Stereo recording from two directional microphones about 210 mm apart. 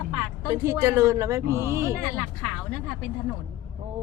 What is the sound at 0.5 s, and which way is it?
Speech, 15° right (ahead or behind).